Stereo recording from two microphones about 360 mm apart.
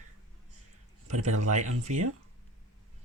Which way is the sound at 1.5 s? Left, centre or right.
Centre.